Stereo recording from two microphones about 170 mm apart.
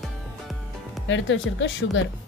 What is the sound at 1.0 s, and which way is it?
Speech, 90° left.